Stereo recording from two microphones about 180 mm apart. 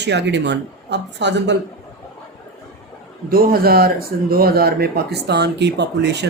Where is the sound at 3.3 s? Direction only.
55° right (ahead or behind).